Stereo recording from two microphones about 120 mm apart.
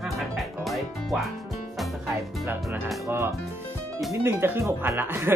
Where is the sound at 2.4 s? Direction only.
15° right (ahead or behind).